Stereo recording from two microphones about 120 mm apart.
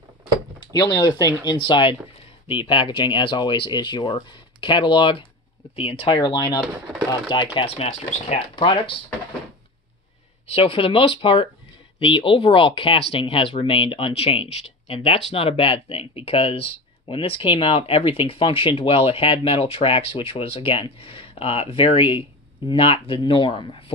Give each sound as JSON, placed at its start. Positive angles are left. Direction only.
{"t": 0.9, "sound": "speech", "side_deg": 40}
{"t": 7.5, "sound": "speech", "side_deg": 60}
{"t": 8.5, "sound": "speech", "side_deg": 45}
{"t": 10.5, "sound": "speech", "side_deg": 50}